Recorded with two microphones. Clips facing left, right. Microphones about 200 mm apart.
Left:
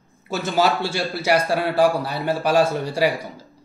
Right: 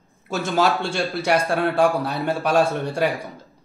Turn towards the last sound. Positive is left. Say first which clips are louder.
# left 1 dB
turn(degrees=5)  # may be behind; listen again after turning